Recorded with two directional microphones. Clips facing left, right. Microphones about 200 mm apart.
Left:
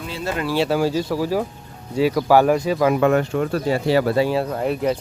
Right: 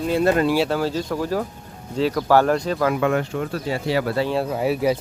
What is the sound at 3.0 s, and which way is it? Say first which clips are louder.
Speech: left 4 dB; 45° left (ahead or behind).